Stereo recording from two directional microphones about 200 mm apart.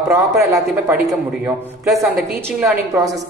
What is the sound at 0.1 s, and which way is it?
Speech, 15° right (ahead or behind).